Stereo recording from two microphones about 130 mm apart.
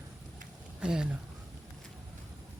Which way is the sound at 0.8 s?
5° right (ahead or behind).